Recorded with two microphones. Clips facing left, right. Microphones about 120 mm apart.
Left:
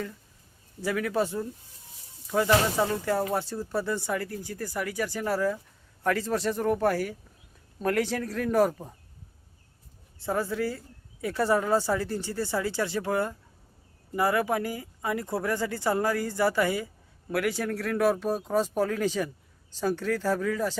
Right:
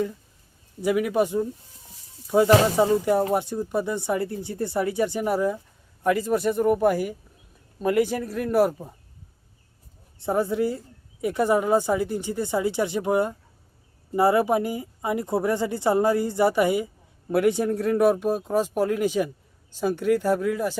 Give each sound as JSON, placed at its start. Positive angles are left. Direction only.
{"t": 0.8, "sound": "speech", "side_deg": -15}
{"t": 10.2, "sound": "speech", "side_deg": -20}